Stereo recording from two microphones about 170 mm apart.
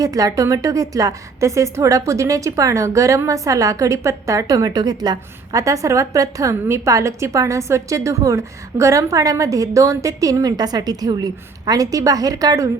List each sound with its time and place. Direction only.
0.0 s a woman's voice: 20° right (ahead or behind)